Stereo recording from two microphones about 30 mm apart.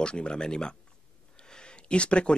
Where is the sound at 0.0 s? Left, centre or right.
Left.